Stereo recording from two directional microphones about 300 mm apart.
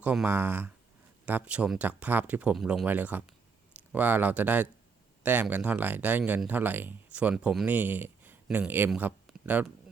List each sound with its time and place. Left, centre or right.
0.0 s speech: centre